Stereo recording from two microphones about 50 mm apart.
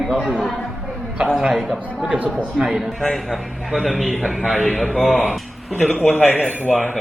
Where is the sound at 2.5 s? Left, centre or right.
Centre.